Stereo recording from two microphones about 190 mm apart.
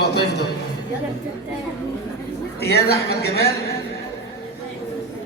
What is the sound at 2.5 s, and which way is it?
Speech, 55° left (ahead or behind).